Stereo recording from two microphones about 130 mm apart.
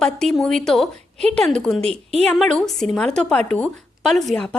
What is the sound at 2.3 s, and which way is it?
A woman's voice, 5° left (ahead or behind).